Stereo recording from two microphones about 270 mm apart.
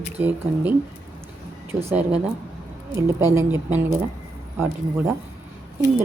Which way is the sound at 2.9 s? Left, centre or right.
Centre.